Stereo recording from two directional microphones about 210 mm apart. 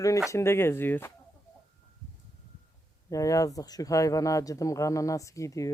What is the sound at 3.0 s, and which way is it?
Speech, 15° left (ahead or behind).